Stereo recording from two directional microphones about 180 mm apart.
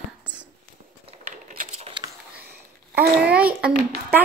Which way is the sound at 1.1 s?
45° right (ahead or behind).